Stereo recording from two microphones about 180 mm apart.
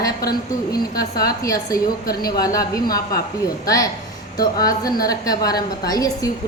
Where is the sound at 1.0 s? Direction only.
20° left (ahead or behind).